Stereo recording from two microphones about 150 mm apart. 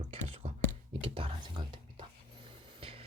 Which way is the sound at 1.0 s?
35° right (ahead or behind).